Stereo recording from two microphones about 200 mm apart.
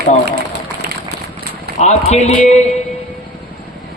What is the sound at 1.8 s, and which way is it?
Speech, 35° left (ahead or behind).